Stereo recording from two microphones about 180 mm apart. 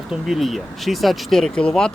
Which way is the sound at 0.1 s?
Centre (ahead or behind).